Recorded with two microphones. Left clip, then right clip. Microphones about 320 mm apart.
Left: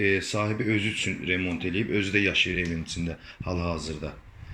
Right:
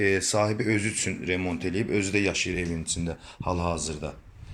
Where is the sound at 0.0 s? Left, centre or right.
Centre.